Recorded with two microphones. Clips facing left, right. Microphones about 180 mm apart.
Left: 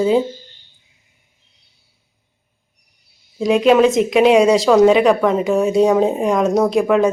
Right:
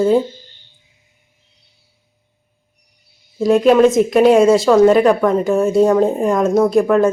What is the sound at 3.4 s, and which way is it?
A woman's voice, centre (ahead or behind).